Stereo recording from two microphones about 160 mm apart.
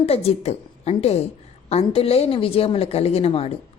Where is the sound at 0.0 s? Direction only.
40° left (ahead or behind).